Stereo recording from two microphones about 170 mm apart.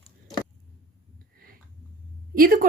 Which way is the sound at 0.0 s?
25° left (ahead or behind).